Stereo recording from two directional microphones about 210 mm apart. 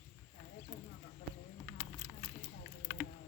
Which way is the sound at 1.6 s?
5° left (ahead or behind).